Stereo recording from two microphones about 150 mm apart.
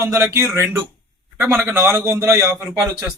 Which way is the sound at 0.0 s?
15° right (ahead or behind).